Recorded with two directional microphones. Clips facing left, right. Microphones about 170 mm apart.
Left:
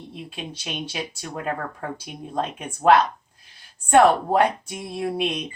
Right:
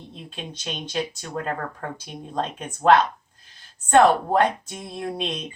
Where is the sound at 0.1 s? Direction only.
10° left (ahead or behind).